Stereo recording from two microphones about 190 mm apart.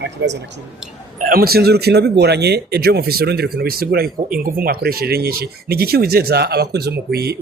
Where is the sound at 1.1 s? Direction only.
50° right (ahead or behind).